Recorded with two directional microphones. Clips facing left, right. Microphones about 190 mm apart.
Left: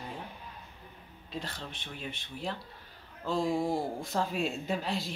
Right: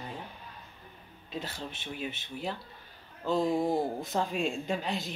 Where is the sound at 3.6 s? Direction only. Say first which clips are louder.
Right 2 dB; 20° right (ahead or behind).